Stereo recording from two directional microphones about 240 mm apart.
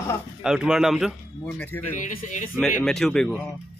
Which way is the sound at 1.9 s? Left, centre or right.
Left.